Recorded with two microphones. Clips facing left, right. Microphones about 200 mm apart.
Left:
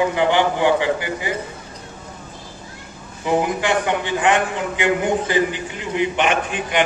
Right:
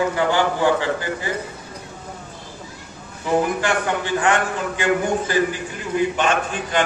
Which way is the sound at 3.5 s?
20° left (ahead or behind).